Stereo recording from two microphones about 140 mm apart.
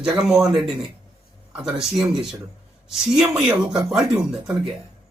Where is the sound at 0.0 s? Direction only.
5° right (ahead or behind).